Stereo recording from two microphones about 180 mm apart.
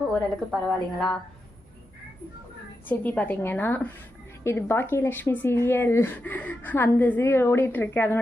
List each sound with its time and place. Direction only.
0.1 s a woman's voice: centre (ahead or behind)
2.9 s speech: 10° left (ahead or behind)